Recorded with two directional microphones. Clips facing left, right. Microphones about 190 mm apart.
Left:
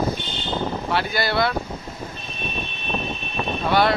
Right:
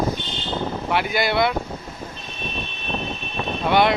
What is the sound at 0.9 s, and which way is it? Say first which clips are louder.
Speech: right 3 dB; 15° right (ahead or behind).